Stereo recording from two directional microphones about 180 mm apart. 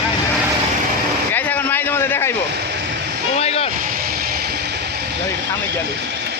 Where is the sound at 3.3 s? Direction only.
35° left (ahead or behind).